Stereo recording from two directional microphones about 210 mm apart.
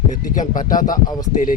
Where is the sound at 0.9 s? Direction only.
15° left (ahead or behind).